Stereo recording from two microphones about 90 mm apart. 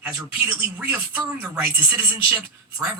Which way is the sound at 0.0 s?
25° right (ahead or behind).